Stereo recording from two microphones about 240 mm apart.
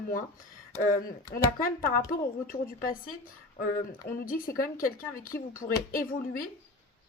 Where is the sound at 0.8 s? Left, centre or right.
Left.